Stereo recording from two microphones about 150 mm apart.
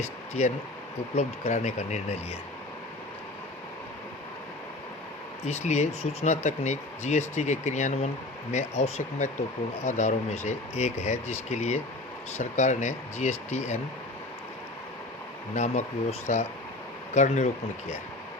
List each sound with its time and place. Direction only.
0.0 s speech: 50° left (ahead or behind)
5.5 s speech: 50° left (ahead or behind)
15.5 s speech: 50° left (ahead or behind)